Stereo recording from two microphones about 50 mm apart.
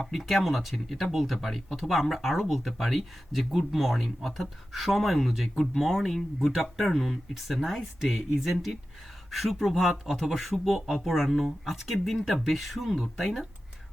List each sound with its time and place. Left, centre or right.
0.0 s speech: centre